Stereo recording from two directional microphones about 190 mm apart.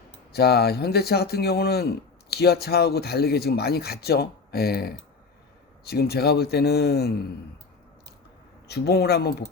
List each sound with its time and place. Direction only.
0.3 s speech: 55° left (ahead or behind)
8.6 s speech: 60° left (ahead or behind)